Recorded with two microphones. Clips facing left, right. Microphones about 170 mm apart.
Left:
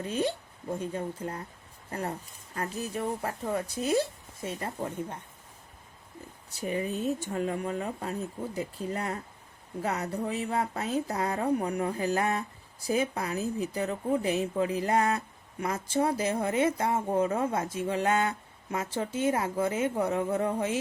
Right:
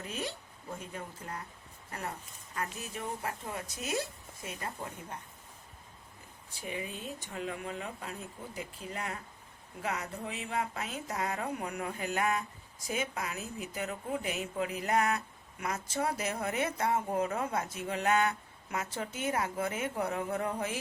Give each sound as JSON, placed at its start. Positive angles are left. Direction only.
{"t": 0.0, "sound": "speech", "side_deg": 30}
{"t": 6.6, "sound": "speech", "side_deg": 45}